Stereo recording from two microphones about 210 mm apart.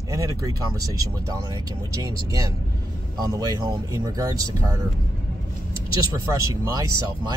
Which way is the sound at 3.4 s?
15° right (ahead or behind).